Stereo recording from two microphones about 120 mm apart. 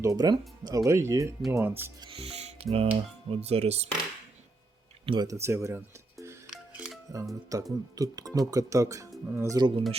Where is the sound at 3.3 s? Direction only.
60° right (ahead or behind).